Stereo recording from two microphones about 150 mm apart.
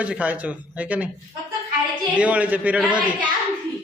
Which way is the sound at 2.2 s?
10° right (ahead or behind).